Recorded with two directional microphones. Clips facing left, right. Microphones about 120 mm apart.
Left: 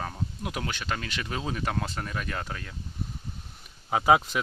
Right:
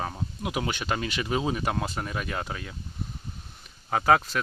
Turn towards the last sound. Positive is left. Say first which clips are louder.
# even
turn(degrees=15)  # may be behind; listen again after turning